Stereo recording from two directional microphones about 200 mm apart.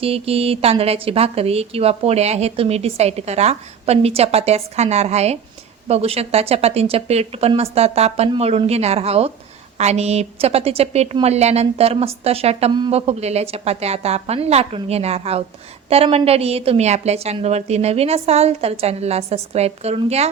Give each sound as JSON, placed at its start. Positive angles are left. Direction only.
{"t": 0.0, "sound": "a woman's voice", "side_deg": -30}